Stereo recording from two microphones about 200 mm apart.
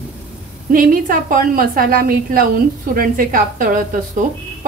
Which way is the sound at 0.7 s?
45° right (ahead or behind).